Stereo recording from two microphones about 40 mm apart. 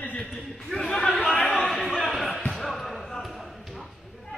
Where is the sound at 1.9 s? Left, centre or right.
Centre.